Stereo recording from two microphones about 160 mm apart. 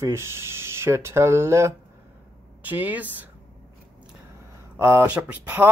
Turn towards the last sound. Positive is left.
turn(degrees=-10)  # may be behind; listen again after turning